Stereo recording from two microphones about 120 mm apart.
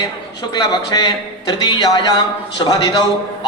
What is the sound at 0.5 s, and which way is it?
Speech, 35° left (ahead or behind).